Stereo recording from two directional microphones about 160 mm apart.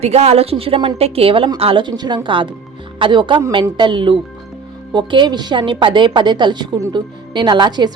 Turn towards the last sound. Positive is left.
turn(degrees=-25)  # may be behind; listen again after turning